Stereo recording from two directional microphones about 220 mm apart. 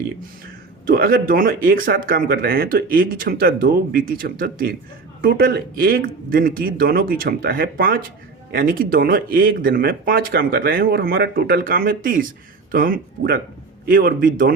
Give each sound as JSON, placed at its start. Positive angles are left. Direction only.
{"t": 0.9, "sound": "speech", "side_deg": -45}